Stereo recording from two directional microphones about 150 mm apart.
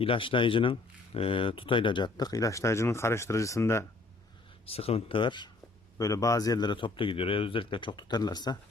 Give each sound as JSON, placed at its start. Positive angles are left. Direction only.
{"t": 0.0, "sound": "speech", "side_deg": 35}
{"t": 4.6, "sound": "speech", "side_deg": 40}